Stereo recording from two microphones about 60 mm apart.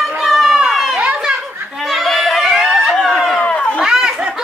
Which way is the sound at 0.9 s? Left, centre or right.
Centre.